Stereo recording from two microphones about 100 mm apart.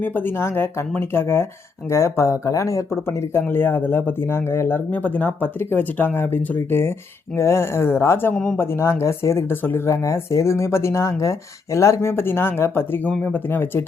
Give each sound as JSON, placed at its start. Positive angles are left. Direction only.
{"t": 0.0, "sound": "speech", "side_deg": 20}